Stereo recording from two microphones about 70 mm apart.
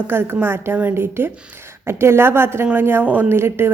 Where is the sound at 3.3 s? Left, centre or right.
Right.